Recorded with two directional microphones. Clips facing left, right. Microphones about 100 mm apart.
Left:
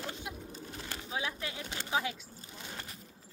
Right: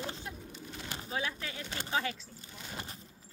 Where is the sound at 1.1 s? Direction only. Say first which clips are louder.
Even; 10° left (ahead or behind).